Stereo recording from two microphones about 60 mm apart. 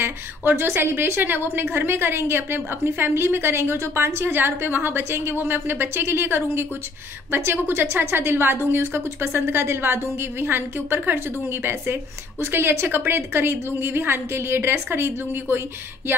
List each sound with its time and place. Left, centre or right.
0.0 s a woman's voice: right